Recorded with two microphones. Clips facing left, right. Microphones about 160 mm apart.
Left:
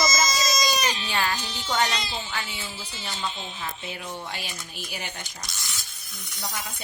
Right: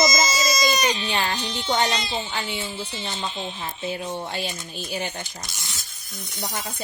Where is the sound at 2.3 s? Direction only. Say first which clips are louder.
Right 5 dB; 30° right (ahead or behind).